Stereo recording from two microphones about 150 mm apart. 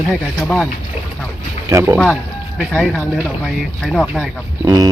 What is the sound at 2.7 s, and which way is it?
Speech, 10° left (ahead or behind).